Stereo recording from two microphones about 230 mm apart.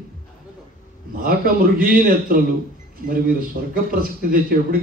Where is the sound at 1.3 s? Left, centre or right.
Right.